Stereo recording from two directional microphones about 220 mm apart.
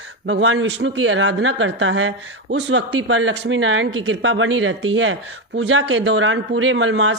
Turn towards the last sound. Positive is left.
turn(degrees=-60)  # may be behind; listen again after turning